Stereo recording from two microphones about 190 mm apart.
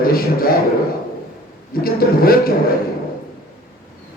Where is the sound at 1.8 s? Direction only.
50° left (ahead or behind).